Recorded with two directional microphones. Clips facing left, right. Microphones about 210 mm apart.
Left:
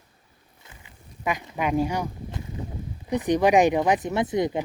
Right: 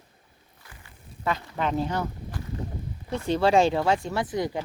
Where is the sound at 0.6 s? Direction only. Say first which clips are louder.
Even; 15° left (ahead or behind).